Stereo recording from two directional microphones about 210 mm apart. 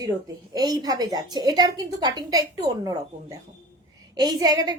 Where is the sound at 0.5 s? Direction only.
20° right (ahead or behind).